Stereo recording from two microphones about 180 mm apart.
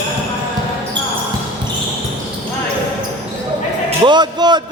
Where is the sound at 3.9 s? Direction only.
25° right (ahead or behind).